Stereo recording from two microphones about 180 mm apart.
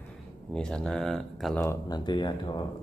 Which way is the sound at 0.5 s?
5° left (ahead or behind).